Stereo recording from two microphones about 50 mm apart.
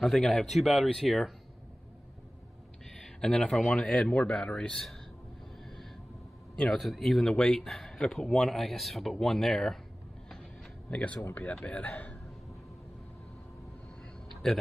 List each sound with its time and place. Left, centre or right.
0.0 s speech: centre
2.8 s a sound: centre
3.6 s a man's voice: left
6.5 s a man's voice: centre
6.8 s speech: centre
7.2 s speech: centre
10.4 s a sound: left
11.3 s a man's voice: left
14.3 s a sound: centre